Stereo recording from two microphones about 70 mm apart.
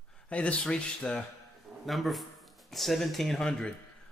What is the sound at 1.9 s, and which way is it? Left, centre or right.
Speech, centre.